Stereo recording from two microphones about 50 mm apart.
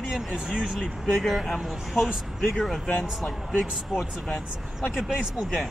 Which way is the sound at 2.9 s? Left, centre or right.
Left.